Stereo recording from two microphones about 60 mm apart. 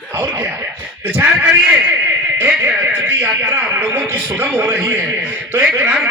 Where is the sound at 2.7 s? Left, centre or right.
Right.